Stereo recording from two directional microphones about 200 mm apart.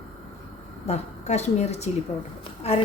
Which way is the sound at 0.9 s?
35° left (ahead or behind).